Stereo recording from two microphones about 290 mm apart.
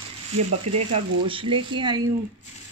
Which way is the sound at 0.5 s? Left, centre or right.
Right.